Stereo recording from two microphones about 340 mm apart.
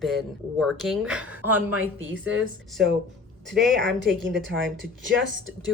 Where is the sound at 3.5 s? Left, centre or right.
Centre.